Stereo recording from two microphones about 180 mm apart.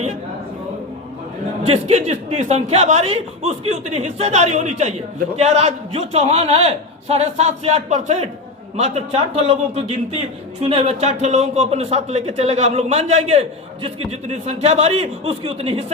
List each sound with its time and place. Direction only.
1.6 s a man's voice: 35° right (ahead or behind)